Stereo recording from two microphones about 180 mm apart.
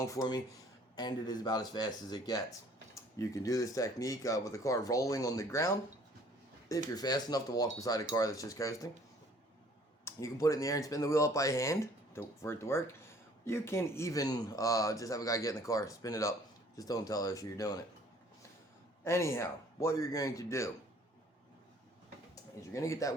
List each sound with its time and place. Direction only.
0.0 s speech: 20° left (ahead or behind)
6.9 s speech: 20° left (ahead or behind)
10.0 s speech: 15° left (ahead or behind)
19.0 s speech: 15° left (ahead or behind)
22.7 s speech: 15° left (ahead or behind)